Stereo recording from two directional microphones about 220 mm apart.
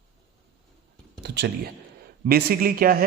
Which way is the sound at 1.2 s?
50° right (ahead or behind).